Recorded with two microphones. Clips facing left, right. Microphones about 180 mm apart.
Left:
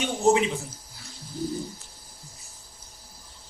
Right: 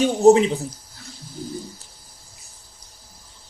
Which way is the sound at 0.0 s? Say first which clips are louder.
Right 8 dB; 35° right (ahead or behind).